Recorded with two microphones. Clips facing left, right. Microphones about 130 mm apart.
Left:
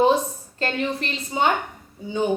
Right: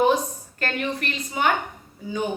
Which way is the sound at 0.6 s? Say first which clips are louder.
Left 2 dB; 25° left (ahead or behind).